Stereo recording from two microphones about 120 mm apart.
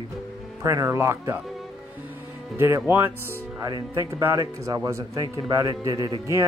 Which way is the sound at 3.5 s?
30° right (ahead or behind).